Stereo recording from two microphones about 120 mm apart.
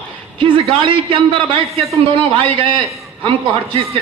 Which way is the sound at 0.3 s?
45° right (ahead or behind).